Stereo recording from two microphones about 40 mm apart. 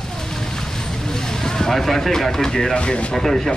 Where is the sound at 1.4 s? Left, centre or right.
Centre.